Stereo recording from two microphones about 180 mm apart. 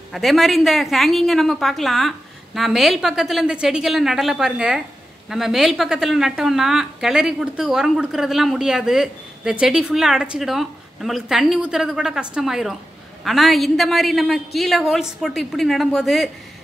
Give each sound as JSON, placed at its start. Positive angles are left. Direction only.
{"t": 0.1, "sound": "a woman's voice", "side_deg": 0}